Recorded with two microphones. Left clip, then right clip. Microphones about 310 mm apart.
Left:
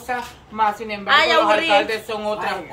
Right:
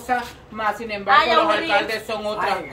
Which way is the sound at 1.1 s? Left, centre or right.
Left.